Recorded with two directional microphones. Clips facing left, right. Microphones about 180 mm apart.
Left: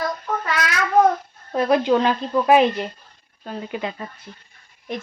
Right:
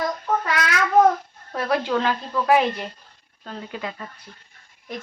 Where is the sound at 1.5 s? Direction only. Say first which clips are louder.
Left 5 dB; 20° left (ahead or behind).